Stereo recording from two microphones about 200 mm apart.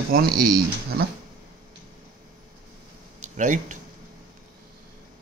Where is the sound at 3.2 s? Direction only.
40° right (ahead or behind).